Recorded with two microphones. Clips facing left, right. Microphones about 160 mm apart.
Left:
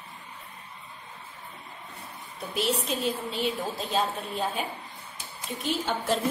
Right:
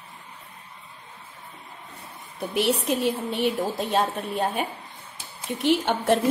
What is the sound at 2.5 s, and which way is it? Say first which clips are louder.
A woman's voice: right 5 dB; 70° right (ahead or behind).